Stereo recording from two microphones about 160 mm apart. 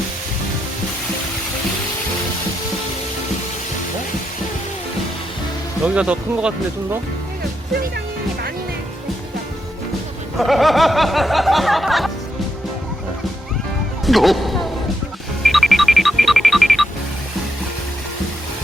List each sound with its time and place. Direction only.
5.8 s speech: 5° right (ahead or behind)
7.7 s music: 80° right
10.3 s music: centre (ahead or behind)
14.0 s music: centre (ahead or behind)